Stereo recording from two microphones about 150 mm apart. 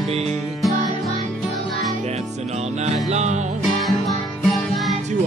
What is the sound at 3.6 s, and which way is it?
Music, centre (ahead or behind).